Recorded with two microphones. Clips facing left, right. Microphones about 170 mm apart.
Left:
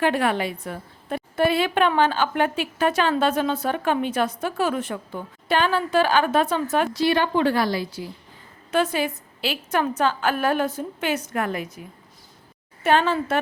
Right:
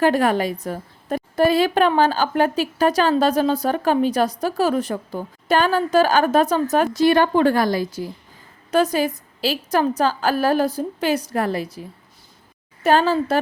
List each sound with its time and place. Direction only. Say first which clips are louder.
0.0 s a woman's voice: right 4 dB; 40° right (ahead or behind)